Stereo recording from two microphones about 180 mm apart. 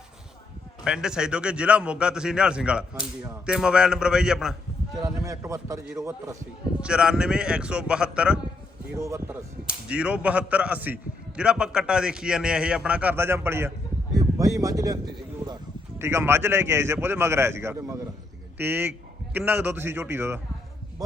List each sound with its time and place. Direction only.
0.9 s a man's voice: 5° right (ahead or behind)
4.9 s a man's voice: 20° right (ahead or behind)
6.8 s a man's voice: 5° right (ahead or behind)
9.0 s a man's voice: 15° right (ahead or behind)